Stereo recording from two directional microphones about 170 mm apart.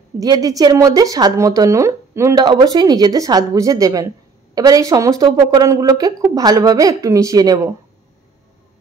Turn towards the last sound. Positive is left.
turn(degrees=-20)  # may be behind; listen again after turning